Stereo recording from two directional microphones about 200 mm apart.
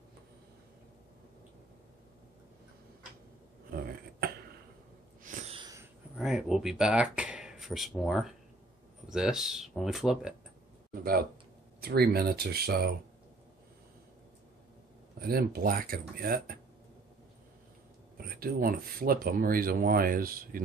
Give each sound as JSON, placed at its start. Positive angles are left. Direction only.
{"t": 5.2, "sound": "a sound", "side_deg": -40}
{"t": 5.6, "sound": "a sound", "side_deg": -15}
{"t": 6.1, "sound": "speech", "side_deg": 0}
{"t": 11.8, "sound": "speech", "side_deg": -50}
{"t": 15.1, "sound": "speech", "side_deg": -50}
{"t": 18.1, "sound": "speech", "side_deg": -50}